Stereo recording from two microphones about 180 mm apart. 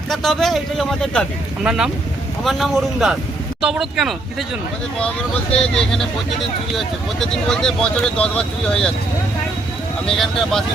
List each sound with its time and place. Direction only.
0.1 s speech: centre (ahead or behind)
7.4 s speech: 5° left (ahead or behind)
10.2 s speech: centre (ahead or behind)